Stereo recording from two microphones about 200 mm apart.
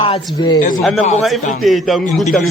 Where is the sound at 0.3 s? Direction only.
20° left (ahead or behind).